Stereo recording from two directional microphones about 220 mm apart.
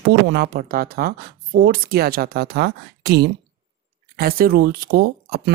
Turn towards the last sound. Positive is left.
turn(degrees=-45)  # may be behind; listen again after turning